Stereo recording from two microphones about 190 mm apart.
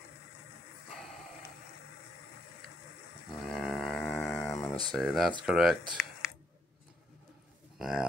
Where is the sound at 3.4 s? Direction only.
Centre (ahead or behind).